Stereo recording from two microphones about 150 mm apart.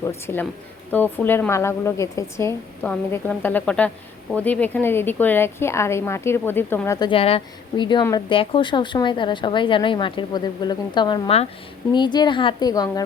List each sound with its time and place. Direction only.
0.0 s a woman's voice: 15° left (ahead or behind)
2.8 s a woman's voice: 10° left (ahead or behind)
7.1 s a woman's voice: 40° left (ahead or behind)